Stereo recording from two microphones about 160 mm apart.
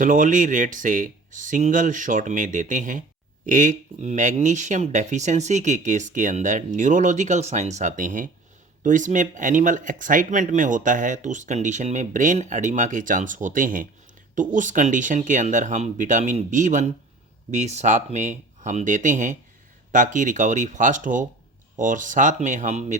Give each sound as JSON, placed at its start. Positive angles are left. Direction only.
{"t": 0.0, "sound": "speech", "side_deg": -55}